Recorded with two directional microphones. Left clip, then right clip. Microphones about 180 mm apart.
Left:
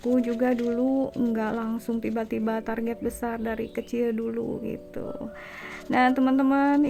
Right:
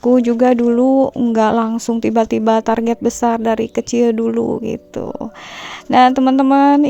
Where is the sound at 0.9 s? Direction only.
15° right (ahead or behind).